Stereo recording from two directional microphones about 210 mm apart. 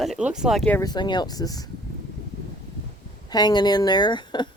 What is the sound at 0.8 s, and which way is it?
Speech, 20° left (ahead or behind).